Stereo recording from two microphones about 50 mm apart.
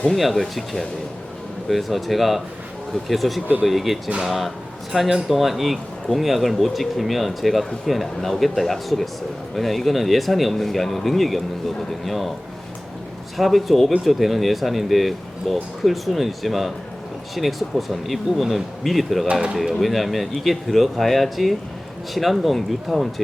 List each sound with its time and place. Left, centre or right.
0.1 s speech: centre
13.3 s speech: centre
19.3 s speech: centre
19.8 s speech: centre